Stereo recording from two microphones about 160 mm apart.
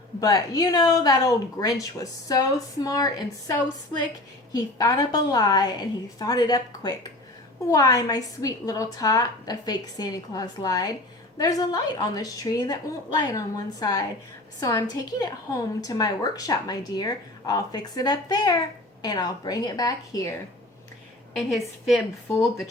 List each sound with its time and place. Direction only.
0.2 s a woman's voice: 25° left (ahead or behind)
4.5 s a woman's voice: 20° left (ahead or behind)
21.3 s a woman's voice: centre (ahead or behind)
22.3 s speech: 15° left (ahead or behind)